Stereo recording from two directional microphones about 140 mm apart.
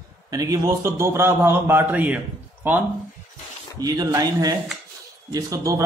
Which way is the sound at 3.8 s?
25° right (ahead or behind).